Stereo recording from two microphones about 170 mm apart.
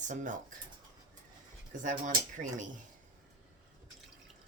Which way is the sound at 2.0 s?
50° right (ahead or behind).